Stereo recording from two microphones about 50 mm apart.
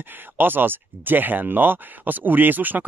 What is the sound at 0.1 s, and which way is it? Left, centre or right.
Speech, right.